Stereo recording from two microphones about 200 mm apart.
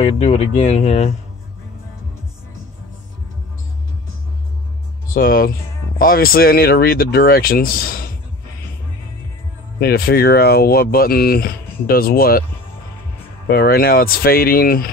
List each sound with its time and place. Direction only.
0.0 s speech: 30° left (ahead or behind)
5.1 s speech: 45° left (ahead or behind)
9.8 s speech: 50° left (ahead or behind)
13.5 s speech: 50° left (ahead or behind)